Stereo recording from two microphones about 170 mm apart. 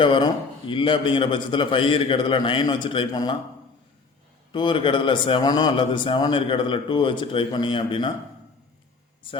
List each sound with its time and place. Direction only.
0.0 s a man's voice: 30° left (ahead or behind)
4.5 s a man's voice: 30° left (ahead or behind)